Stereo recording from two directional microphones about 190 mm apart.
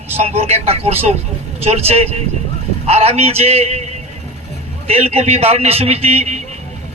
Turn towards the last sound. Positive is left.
turn(degrees=-35)  # may be behind; listen again after turning